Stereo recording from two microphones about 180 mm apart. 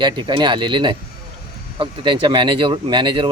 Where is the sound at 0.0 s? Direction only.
25° right (ahead or behind).